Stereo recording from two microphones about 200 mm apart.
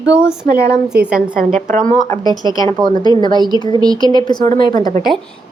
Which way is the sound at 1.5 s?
40° right (ahead or behind).